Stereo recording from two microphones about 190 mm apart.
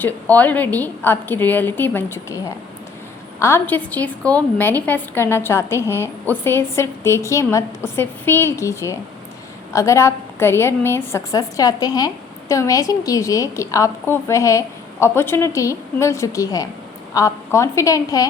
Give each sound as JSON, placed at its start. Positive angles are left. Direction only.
{"t": 0.0, "sound": "a woman's voice", "side_deg": 10}
{"t": 3.4, "sound": "a woman's voice", "side_deg": 10}